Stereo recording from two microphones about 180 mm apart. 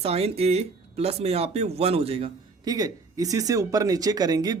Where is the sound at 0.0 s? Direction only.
35° right (ahead or behind).